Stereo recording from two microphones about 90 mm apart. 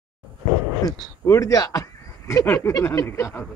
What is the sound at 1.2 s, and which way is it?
Speech, 35° left (ahead or behind).